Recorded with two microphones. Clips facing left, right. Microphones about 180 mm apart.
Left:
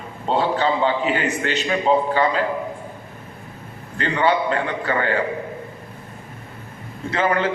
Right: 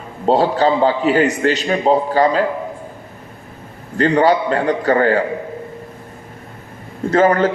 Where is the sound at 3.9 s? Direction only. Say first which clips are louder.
Right 6 dB; 40° right (ahead or behind).